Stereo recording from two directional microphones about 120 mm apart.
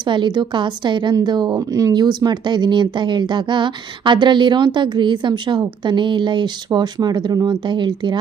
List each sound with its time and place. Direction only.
0.0 s a woman's voice: 40° right (ahead or behind)